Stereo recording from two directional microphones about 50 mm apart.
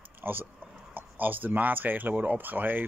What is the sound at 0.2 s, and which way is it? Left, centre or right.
Speech, right.